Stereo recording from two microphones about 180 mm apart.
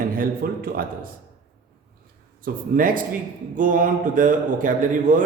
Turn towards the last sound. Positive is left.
turn(degrees=-45)  # may be behind; listen again after turning